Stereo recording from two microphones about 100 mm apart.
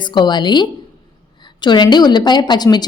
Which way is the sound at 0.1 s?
50° left (ahead or behind).